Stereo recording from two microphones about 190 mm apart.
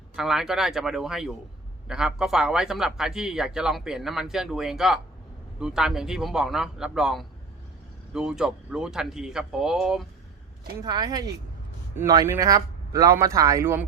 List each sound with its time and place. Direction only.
0.2 s speech: centre (ahead or behind)
10.8 s a man's voice: 20° right (ahead or behind)